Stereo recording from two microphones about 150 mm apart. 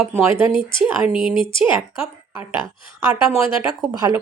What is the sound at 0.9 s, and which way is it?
Speech, 10° right (ahead or behind).